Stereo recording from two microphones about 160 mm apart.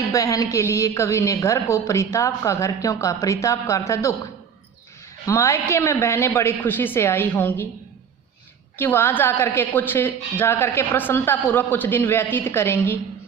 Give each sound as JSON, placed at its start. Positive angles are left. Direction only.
{"t": 0.1, "sound": "speech", "side_deg": 20}
{"t": 5.2, "sound": "a woman's voice", "side_deg": 20}
{"t": 8.8, "sound": "a woman's voice", "side_deg": 15}